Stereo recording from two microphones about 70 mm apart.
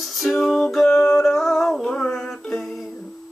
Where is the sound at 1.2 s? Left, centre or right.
Centre.